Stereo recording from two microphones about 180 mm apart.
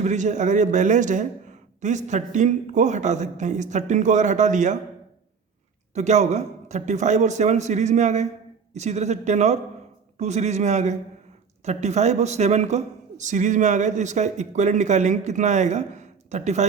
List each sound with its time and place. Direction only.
0.0 s a man's voice: 40° right (ahead or behind)
5.9 s a man's voice: 40° right (ahead or behind)